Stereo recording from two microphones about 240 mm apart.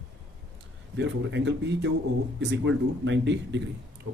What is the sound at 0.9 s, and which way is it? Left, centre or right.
Speech, right.